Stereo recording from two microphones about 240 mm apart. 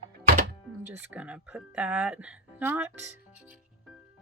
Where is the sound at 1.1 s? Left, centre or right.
Centre.